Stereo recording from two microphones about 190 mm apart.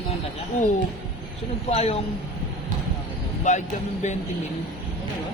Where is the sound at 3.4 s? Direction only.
40° left (ahead or behind).